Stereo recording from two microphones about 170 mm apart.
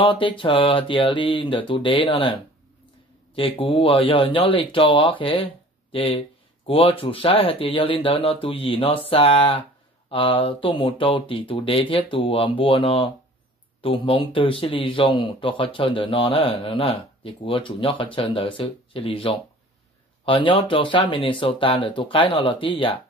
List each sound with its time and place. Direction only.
0.0 s speech: 30° left (ahead or behind)
3.3 s speech: 30° left (ahead or behind)